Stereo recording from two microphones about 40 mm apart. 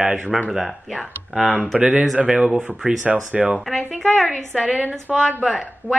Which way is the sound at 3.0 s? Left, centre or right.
Right.